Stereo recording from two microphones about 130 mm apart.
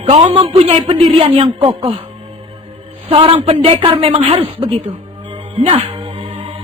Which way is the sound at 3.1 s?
45° right (ahead or behind).